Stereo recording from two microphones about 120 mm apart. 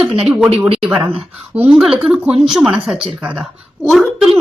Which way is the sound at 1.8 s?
5° right (ahead or behind).